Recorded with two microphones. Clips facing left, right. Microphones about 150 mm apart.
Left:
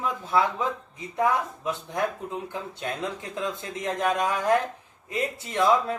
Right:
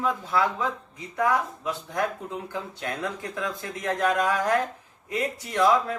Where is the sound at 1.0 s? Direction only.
20° left (ahead or behind).